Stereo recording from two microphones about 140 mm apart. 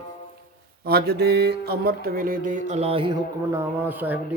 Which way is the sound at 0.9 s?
90° right.